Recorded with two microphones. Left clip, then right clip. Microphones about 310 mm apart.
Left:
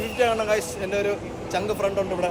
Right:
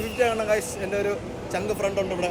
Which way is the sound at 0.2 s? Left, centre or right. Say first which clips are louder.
Left 1 dB; centre.